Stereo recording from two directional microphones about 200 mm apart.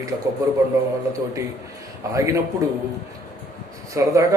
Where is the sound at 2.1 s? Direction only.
15° right (ahead or behind).